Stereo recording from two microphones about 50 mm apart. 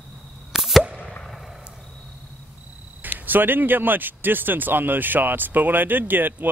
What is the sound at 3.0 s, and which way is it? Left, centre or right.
Speech, right.